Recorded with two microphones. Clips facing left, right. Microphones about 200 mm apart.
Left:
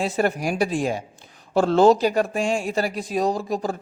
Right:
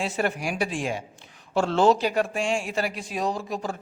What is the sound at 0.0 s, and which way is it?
A man's voice, 40° left (ahead or behind).